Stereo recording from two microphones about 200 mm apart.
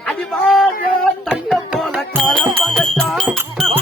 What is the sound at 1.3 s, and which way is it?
Music, 5° right (ahead or behind).